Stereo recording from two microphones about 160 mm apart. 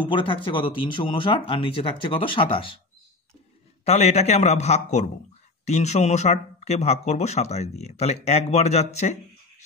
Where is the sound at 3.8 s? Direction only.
40° left (ahead or behind).